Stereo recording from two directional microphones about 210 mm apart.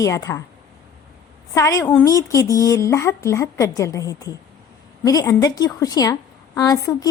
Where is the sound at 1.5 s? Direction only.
15° left (ahead or behind).